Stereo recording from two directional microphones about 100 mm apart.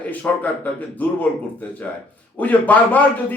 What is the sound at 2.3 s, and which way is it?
Speech, 15° left (ahead or behind).